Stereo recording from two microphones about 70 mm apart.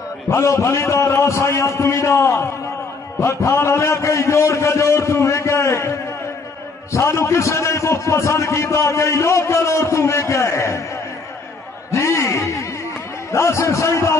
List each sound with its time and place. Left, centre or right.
0.3 s a man's voice: left
11.9 s a sound: left
13.3 s a man's voice: left